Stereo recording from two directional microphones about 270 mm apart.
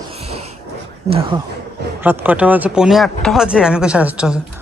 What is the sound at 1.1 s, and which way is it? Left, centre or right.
Speech, right.